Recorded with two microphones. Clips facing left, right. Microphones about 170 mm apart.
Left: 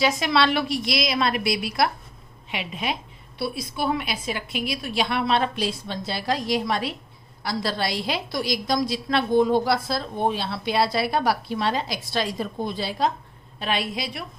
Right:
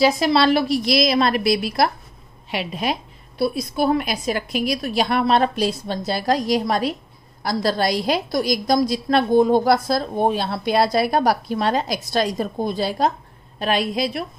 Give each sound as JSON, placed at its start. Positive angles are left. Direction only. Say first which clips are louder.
{"t": 0.0, "sound": "a woman's voice", "louder": "right 5 dB", "side_deg": -35}